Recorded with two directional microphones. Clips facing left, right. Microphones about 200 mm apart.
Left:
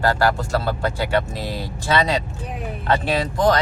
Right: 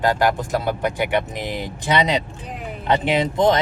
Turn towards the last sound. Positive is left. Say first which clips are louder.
# right 1 dB
turn(degrees=-20)  # may be behind; listen again after turning